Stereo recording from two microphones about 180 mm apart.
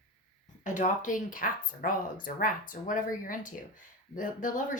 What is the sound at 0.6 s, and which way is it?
Speech, 45° left (ahead or behind).